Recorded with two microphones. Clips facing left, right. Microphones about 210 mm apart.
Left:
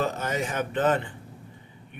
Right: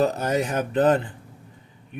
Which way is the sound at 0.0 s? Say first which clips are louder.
Right 6 dB; 40° right (ahead or behind).